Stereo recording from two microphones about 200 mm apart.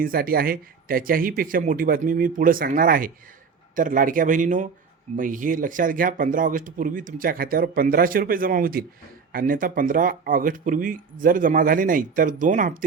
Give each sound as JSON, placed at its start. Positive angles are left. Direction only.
{"t": 0.0, "sound": "speech", "side_deg": -45}